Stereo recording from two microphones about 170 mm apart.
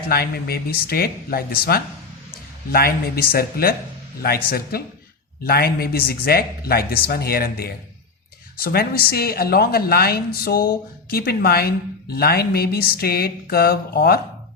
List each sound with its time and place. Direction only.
0.1 s a woman's voice: 65° left (ahead or behind)